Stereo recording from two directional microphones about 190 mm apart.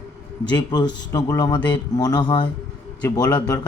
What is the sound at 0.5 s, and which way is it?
A man's voice, 20° left (ahead or behind).